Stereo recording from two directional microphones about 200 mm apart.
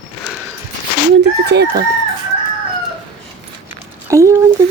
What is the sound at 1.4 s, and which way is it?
Chicken, 55° right (ahead or behind).